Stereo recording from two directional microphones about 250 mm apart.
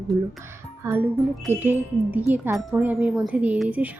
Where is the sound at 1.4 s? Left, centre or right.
Centre.